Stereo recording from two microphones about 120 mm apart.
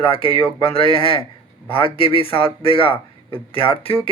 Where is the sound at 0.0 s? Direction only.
50° left (ahead or behind).